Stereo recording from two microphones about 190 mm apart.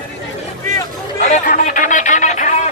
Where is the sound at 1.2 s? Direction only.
40° left (ahead or behind).